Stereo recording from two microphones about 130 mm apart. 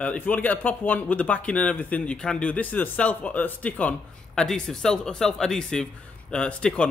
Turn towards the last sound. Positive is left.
turn(degrees=5)  # may be behind; listen again after turning